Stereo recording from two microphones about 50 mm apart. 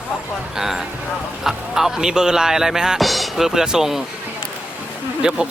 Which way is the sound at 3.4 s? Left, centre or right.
Centre.